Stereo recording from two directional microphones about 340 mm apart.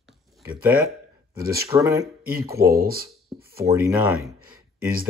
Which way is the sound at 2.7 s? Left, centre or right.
Right.